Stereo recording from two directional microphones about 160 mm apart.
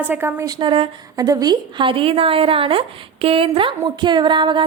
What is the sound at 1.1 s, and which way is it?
A woman's voice, 25° right (ahead or behind).